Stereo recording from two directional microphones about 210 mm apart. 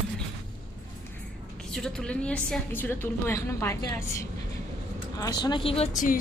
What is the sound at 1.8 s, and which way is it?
A woman's voice, 5° left (ahead or behind).